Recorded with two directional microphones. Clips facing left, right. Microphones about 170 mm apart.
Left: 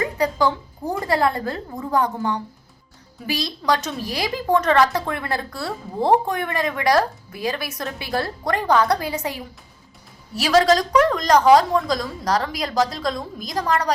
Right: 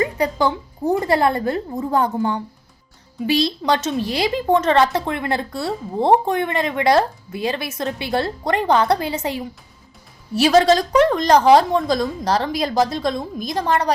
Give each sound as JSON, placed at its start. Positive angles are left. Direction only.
{"t": 0.2, "sound": "speech", "side_deg": -25}